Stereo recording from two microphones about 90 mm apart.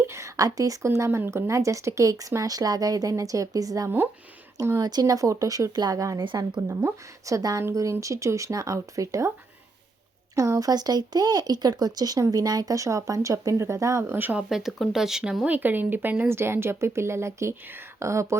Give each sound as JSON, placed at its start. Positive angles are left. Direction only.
{"t": 0.1, "sound": "a sound", "side_deg": -35}
{"t": 0.9, "sound": "speech", "side_deg": -30}
{"t": 3.8, "sound": "speech", "side_deg": -25}
{"t": 4.8, "sound": "speech", "side_deg": -50}
{"t": 6.2, "sound": "speech", "side_deg": -65}
{"t": 6.6, "sound": "speech", "side_deg": -35}
{"t": 10.3, "sound": "speech", "side_deg": -40}
{"t": 14.2, "sound": "speech", "side_deg": -20}
{"t": 14.5, "sound": "speech", "side_deg": -5}
{"t": 15.4, "sound": "speech", "side_deg": -20}